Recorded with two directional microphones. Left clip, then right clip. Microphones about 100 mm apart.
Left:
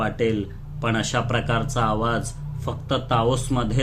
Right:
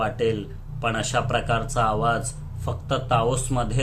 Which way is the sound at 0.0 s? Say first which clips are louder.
Even; 35° left (ahead or behind).